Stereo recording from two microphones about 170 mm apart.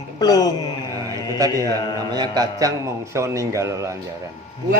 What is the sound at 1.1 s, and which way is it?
A man's voice, 20° right (ahead or behind).